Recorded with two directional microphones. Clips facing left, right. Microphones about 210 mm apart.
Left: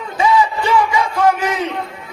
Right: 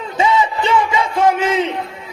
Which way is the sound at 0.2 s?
25° right (ahead or behind).